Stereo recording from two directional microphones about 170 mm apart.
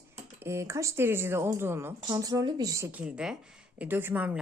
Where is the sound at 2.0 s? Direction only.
25° right (ahead or behind).